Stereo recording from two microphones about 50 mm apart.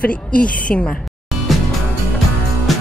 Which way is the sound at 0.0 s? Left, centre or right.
Left.